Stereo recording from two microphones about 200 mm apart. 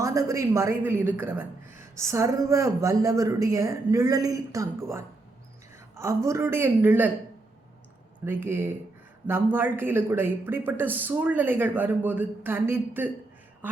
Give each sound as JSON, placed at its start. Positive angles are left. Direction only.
{"t": 0.0, "sound": "speech", "side_deg": -15}
{"t": 8.2, "sound": "speech", "side_deg": -10}